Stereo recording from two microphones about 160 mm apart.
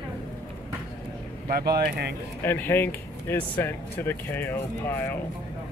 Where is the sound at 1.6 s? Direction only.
85° right.